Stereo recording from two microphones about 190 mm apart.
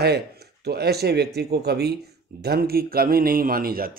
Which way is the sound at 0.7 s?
60° right (ahead or behind).